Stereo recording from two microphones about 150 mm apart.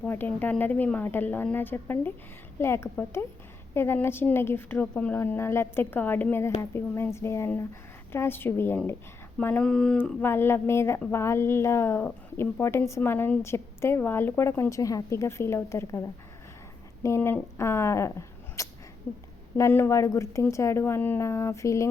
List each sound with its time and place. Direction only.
0.0 s a woman's voice: 10° left (ahead or behind)